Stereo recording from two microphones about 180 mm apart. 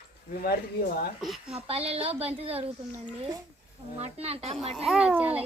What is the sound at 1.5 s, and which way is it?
A woman's voice, 35° right (ahead or behind).